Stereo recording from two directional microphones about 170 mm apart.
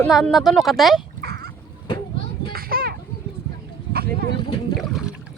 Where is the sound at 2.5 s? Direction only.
60° right (ahead or behind).